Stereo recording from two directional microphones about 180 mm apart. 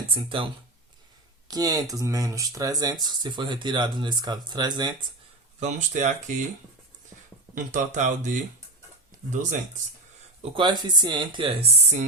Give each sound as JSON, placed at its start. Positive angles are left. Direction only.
{"t": 0.1, "sound": "speech", "side_deg": -30}
{"t": 1.5, "sound": "speech", "side_deg": -20}
{"t": 5.5, "sound": "speech", "side_deg": -40}
{"t": 7.5, "sound": "speech", "side_deg": -45}
{"t": 10.5, "sound": "speech", "side_deg": -25}